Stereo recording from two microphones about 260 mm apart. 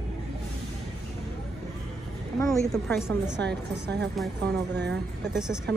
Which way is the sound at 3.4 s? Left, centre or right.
Right.